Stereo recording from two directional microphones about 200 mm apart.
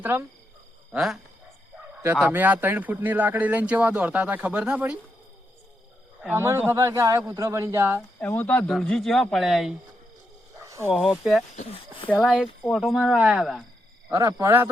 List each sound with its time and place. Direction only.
0.0 s speech: 10° right (ahead or behind)
6.2 s speech: 10° right (ahead or behind)
8.2 s speech: 10° left (ahead or behind)
10.6 s a sound: 15° right (ahead or behind)
11.0 s speech: centre (ahead or behind)
11.5 s speech: 35° left (ahead or behind)
12.0 s speech: centre (ahead or behind)
14.1 s speech: 15° right (ahead or behind)